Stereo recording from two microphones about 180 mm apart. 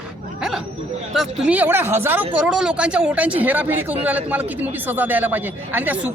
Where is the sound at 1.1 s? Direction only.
5° right (ahead or behind).